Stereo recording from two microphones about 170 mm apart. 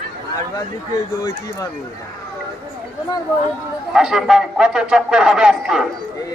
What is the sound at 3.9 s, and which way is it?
A man's voice, 5° right (ahead or behind).